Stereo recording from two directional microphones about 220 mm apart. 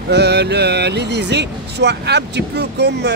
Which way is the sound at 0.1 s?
50° right (ahead or behind).